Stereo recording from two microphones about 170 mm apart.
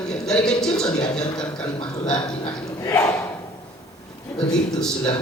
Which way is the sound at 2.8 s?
15° left (ahead or behind).